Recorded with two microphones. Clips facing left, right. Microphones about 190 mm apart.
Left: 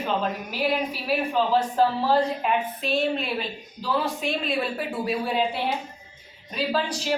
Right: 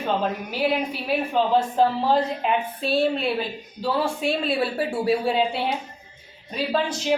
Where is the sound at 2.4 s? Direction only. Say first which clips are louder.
Right 1 dB; 30° right (ahead or behind).